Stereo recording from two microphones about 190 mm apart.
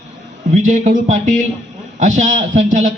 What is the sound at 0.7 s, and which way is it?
A man's voice, 40° right (ahead or behind).